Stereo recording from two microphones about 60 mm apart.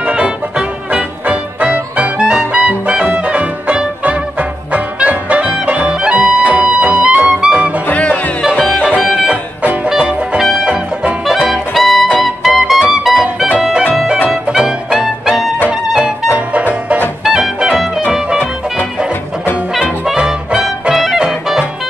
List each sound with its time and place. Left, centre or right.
0.0 s music: centre
7.8 s music: left
8.8 s music: centre
16.3 s music: right
17.2 s music: centre
19.7 s music: centre